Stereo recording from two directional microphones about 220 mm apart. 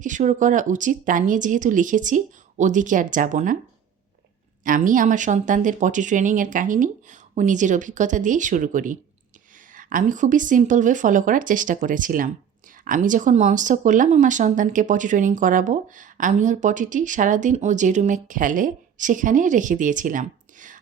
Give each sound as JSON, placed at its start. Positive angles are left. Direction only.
{"t": 0.0, "sound": "speech", "side_deg": -35}
{"t": 4.6, "sound": "speech", "side_deg": -35}